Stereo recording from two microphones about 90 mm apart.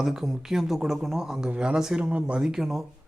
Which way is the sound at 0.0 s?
5° right (ahead or behind).